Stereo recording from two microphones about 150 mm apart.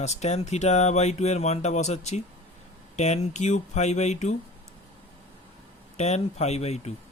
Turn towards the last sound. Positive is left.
turn(degrees=45)  # may be behind; listen again after turning